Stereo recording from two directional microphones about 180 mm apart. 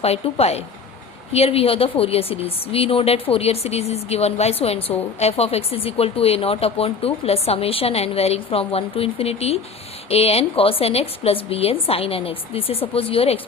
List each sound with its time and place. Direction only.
0.0 s speech: 35° left (ahead or behind)